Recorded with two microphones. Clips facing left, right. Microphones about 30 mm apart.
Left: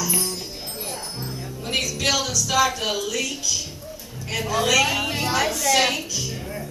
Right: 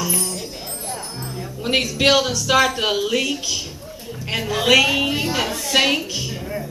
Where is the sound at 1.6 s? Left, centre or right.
Right.